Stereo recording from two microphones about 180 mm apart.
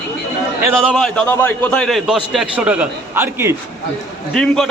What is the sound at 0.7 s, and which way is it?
A man's voice, centre (ahead or behind).